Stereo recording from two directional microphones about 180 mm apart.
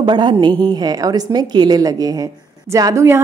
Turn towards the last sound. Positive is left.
turn(degrees=-15)  # may be behind; listen again after turning